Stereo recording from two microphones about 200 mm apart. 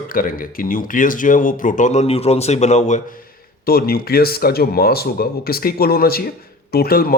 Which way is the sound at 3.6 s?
50° left (ahead or behind).